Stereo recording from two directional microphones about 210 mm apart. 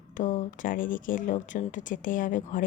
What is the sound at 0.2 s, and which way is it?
Speech, 35° left (ahead or behind).